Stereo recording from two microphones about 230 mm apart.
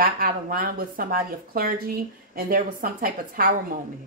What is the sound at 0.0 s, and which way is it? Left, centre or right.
Speech, right.